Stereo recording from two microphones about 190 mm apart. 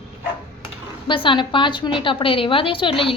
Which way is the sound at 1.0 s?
25° left (ahead or behind).